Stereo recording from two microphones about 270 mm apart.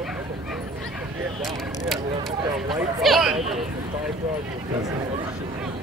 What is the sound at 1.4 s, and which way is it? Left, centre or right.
Speech, centre.